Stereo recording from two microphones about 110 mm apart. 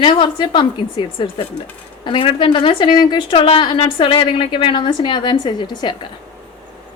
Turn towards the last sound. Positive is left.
turn(degrees=45)  # may be behind; listen again after turning